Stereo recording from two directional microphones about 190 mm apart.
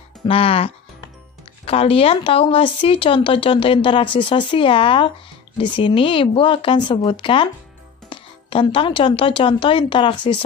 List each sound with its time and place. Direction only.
0.3 s speech: 30° left (ahead or behind)